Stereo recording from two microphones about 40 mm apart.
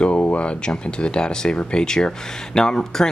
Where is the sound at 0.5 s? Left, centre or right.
Left.